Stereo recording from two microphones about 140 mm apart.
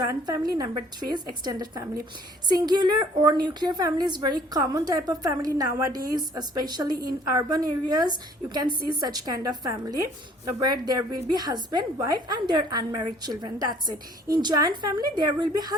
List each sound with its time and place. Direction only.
0.0 s a woman's voice: 25° right (ahead or behind)